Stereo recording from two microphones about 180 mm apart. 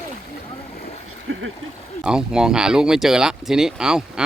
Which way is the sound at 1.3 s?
90° right.